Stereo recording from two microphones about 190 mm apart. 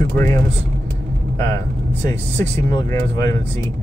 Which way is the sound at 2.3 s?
15° left (ahead or behind).